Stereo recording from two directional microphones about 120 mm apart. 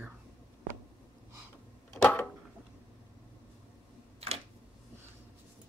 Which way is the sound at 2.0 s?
10° left (ahead or behind).